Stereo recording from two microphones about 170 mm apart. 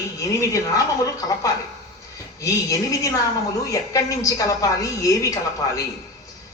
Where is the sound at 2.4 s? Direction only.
20° left (ahead or behind).